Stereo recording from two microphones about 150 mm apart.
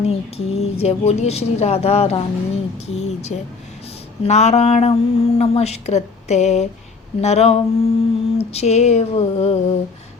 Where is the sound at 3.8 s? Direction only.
40° left (ahead or behind).